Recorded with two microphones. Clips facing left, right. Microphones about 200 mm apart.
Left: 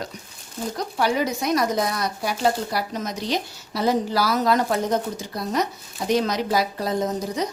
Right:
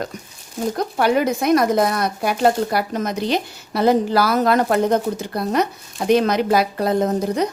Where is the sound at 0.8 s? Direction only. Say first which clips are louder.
Right 4 dB; 55° right (ahead or behind).